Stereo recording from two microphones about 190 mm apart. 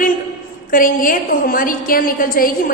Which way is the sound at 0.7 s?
45° left (ahead or behind).